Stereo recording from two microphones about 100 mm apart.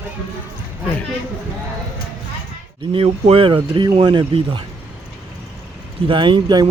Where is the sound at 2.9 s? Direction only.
80° right; by 4.2 s 50° right (ahead or behind).